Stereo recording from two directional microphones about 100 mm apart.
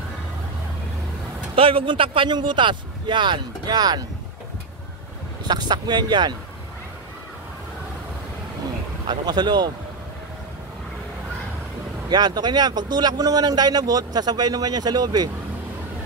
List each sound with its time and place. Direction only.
1.5 s speech: 65° right (ahead or behind); by 4.0 s 45° right (ahead or behind)
5.4 s speech: 45° right (ahead or behind)
9.0 s speech: 50° right (ahead or behind)
12.1 s speech: 45° right (ahead or behind)